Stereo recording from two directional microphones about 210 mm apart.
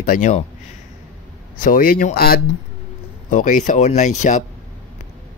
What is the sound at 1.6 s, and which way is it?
Speech, 40° left (ahead or behind).